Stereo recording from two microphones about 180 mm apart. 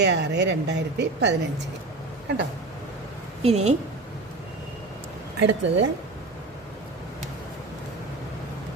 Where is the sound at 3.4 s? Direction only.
35° right (ahead or behind).